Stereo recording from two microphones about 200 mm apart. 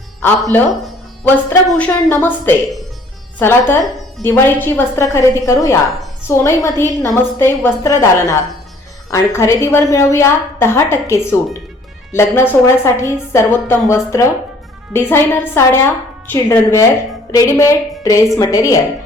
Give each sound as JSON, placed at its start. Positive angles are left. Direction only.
{"t": 0.5, "sound": "a woman's voice", "side_deg": 10}